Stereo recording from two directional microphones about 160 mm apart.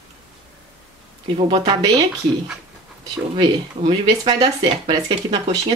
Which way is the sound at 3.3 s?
35° right (ahead or behind).